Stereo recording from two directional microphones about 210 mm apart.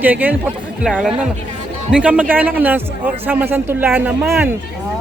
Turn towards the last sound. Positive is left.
turn(degrees=-10)  # may be behind; listen again after turning